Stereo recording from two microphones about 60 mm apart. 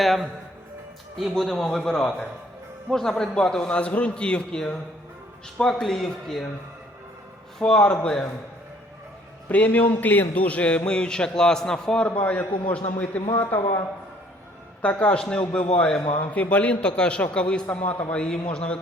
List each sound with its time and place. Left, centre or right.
0.0 s speech: centre
1.3 s a man's voice: centre
3.7 s a man's voice: left
5.8 s a man's voice: centre
7.6 s a man's voice: centre
9.5 s a man's voice: left; by 12.0 s centre
12.0 s a man's voice: left